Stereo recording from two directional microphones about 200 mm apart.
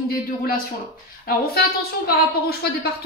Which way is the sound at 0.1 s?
45° left (ahead or behind).